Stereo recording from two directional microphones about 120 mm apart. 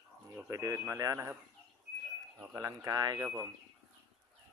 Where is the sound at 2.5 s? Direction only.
25° right (ahead or behind).